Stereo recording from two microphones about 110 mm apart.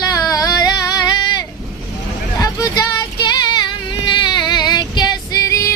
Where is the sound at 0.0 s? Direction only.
35° left (ahead or behind).